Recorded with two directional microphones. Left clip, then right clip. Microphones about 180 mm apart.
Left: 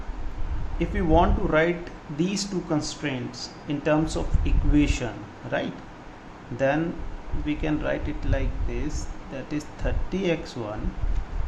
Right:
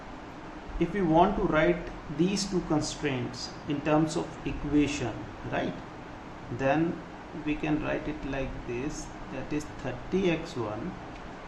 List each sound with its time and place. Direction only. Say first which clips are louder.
0.8 s speech: left 2 dB; 35° left (ahead or behind)
9.5 s speech: left 3 dB; 35° left (ahead or behind)